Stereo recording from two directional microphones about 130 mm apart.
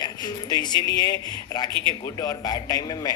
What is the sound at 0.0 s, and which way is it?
A man's voice, 35° left (ahead or behind).